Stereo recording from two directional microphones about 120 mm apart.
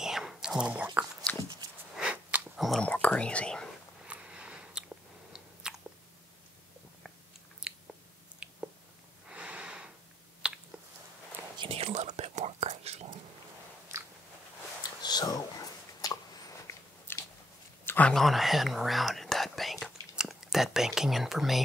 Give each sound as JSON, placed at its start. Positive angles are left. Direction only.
{"t": 0.0, "sound": "whispering", "side_deg": -5}
{"t": 2.0, "sound": "biting", "side_deg": -5}
{"t": 2.9, "sound": "speech", "side_deg": 10}
{"t": 4.0, "sound": "biting", "side_deg": -10}
{"t": 8.4, "sound": "squish", "side_deg": -10}
{"t": 9.3, "sound": "a sound", "side_deg": -10}
{"t": 11.5, "sound": "whispering", "side_deg": -45}
{"t": 15.0, "sound": "a sound", "side_deg": 35}
{"t": 17.8, "sound": "a sound", "side_deg": 15}
{"t": 18.1, "sound": "whispering", "side_deg": 0}